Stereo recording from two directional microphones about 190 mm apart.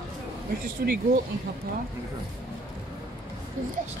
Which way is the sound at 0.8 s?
50° right (ahead or behind).